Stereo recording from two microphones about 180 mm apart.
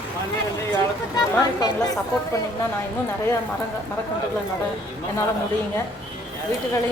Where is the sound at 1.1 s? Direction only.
20° left (ahead or behind).